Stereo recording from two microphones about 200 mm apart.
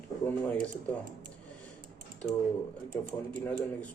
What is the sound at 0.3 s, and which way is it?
Speech, 5° left (ahead or behind).